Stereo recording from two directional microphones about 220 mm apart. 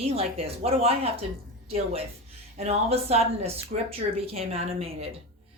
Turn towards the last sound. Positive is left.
turn(degrees=-25)  # may be behind; listen again after turning